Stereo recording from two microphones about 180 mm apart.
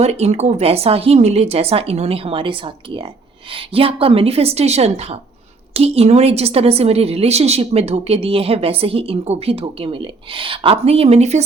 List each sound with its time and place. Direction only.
0.0 s a woman's voice: 35° right (ahead or behind)